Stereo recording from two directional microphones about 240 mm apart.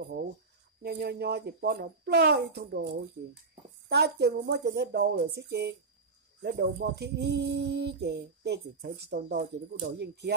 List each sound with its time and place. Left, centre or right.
0.0 s speech: right